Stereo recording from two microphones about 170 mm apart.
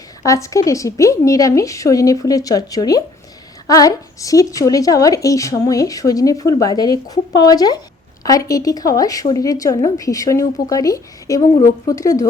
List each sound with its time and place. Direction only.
0.2 s a woman's voice: 20° left (ahead or behind)